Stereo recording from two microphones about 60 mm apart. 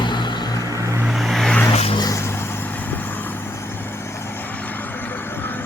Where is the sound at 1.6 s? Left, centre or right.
Left.